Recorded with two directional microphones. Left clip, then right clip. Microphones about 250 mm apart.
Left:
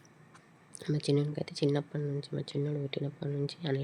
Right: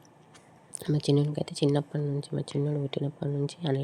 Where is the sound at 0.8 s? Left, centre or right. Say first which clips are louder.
Right 4 dB; centre.